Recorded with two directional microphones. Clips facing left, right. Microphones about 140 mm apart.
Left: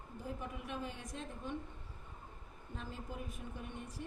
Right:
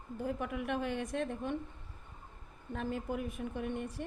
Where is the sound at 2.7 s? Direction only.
65° right (ahead or behind).